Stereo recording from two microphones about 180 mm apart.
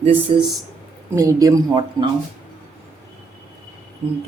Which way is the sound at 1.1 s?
15° right (ahead or behind).